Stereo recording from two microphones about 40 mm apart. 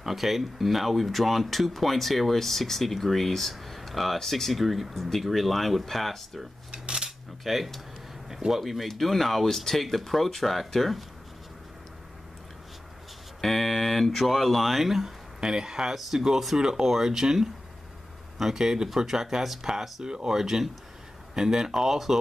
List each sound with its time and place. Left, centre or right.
0.0 s speech: centre
6.7 s cutlery: right
7.1 s cutlery: centre
8.3 s speech: centre
13.4 s speech: centre